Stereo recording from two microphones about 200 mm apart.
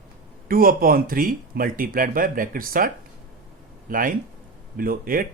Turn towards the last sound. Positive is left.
turn(degrees=-45)  # may be behind; listen again after turning